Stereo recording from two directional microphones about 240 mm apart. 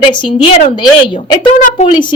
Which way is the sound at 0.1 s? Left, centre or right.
Left.